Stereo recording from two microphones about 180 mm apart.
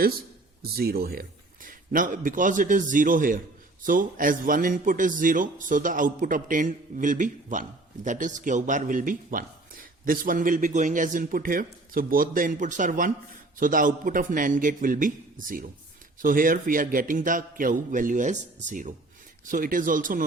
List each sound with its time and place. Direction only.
0.6 s a man's voice: 60° right (ahead or behind)